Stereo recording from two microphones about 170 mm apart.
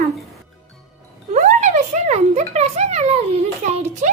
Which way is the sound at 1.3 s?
45° right (ahead or behind).